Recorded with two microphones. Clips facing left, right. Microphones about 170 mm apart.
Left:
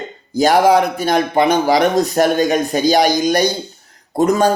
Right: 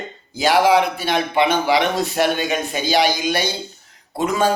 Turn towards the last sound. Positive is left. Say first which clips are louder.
# left 5 dB
turn(degrees=45)  # may be behind; listen again after turning